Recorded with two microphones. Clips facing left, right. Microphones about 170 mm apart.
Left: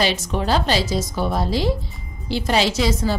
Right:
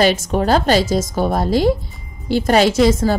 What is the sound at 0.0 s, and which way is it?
A woman's voice, 50° right (ahead or behind).